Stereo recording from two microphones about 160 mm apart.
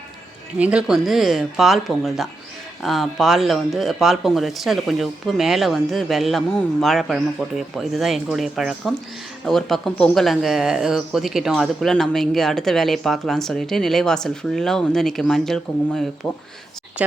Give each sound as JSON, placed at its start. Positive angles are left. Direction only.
{"t": 0.6, "sound": "speech", "side_deg": -5}
{"t": 17.0, "sound": "speech", "side_deg": -10}